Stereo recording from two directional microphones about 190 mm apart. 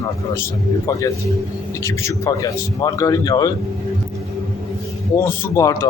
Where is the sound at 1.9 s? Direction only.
15° left (ahead or behind).